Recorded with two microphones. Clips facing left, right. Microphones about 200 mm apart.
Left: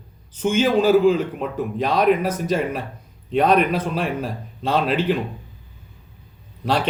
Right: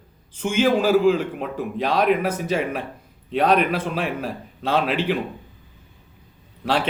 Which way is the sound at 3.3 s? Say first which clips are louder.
Left 2 dB; 45° left (ahead or behind).